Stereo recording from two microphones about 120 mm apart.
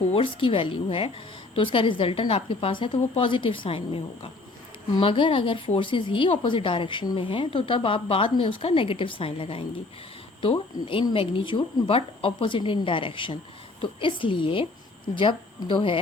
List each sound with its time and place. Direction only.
0.1 s a woman's voice: 50° left (ahead or behind)